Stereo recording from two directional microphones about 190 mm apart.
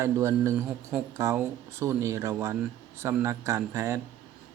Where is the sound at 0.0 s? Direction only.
15° right (ahead or behind).